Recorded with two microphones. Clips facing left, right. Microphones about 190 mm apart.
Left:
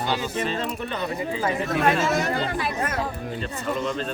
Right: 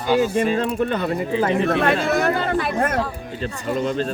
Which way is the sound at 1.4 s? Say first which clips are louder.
Right 3 dB; 60° right (ahead or behind).